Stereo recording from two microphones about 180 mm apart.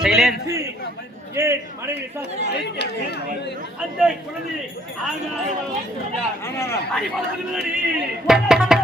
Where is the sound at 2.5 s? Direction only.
65° left (ahead or behind).